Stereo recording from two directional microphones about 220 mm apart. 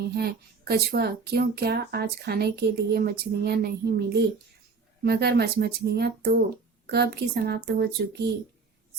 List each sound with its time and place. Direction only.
0.0 s speech: 45° right (ahead or behind)